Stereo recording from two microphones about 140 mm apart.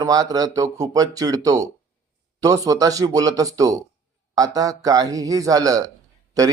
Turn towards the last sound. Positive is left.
turn(degrees=-25)  # may be behind; listen again after turning